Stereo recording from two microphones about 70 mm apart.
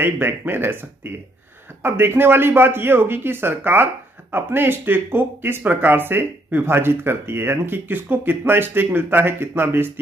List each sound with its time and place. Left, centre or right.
0.0 s speech: right